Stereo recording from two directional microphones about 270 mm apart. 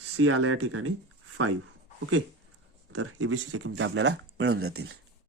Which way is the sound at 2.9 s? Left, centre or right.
Right.